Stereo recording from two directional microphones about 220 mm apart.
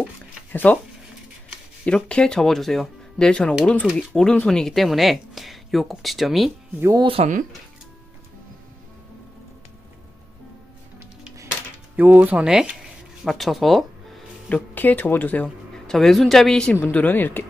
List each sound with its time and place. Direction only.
0.0 s a sound: 5° left (ahead or behind)
1.9 s speech: 5° left (ahead or behind)
6.8 s speech: 15° right (ahead or behind)
7.1 s speech: 30° right (ahead or behind)
12.0 s speech: 10° right (ahead or behind); by 17.5 s 10° left (ahead or behind)